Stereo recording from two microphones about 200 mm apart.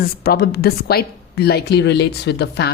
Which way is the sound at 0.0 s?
50° left (ahead or behind).